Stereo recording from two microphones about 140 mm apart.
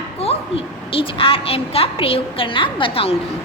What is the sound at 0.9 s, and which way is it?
A woman's voice, 40° left (ahead or behind).